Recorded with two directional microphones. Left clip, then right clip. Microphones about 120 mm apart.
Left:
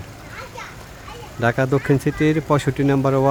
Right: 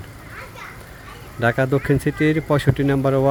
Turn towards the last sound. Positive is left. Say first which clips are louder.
# left 1 dB
turn(degrees=5)  # may be behind; listen again after turning